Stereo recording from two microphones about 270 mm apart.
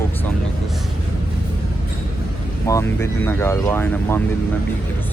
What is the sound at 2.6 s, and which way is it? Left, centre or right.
Speech, centre.